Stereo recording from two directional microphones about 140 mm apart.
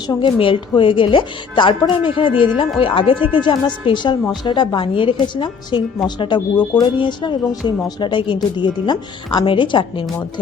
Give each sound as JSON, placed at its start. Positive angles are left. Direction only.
{"t": 0.1, "sound": "speech", "side_deg": 35}